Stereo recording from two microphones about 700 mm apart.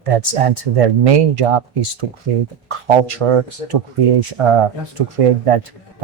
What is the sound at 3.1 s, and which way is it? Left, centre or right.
Speech, right.